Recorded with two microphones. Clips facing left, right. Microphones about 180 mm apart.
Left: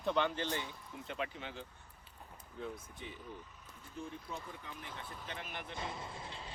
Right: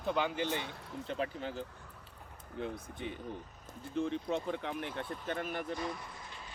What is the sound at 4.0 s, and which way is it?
Speech, 85° right.